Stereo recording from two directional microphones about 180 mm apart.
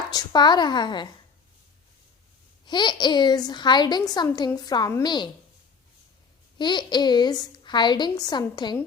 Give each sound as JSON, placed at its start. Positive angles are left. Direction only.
{"t": 0.1, "sound": "a woman's voice", "side_deg": 25}
{"t": 2.6, "sound": "a woman's voice", "side_deg": 25}
{"t": 6.6, "sound": "a woman's voice", "side_deg": 25}